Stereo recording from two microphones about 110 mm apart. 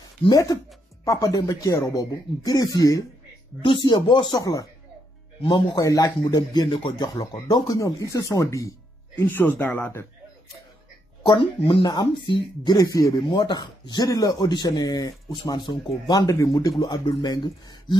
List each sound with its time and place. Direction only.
1.0 s speech: 30° left (ahead or behind)
3.6 s speech: 45° left (ahead or behind)
4.4 s speech: 35° left (ahead or behind)
9.2 s speech: 15° left (ahead or behind)
11.2 s speech: 45° left (ahead or behind)
11.8 s speech: 35° left (ahead or behind)